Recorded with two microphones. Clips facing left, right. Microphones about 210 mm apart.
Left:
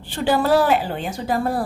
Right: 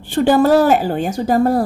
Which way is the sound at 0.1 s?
45° right (ahead or behind).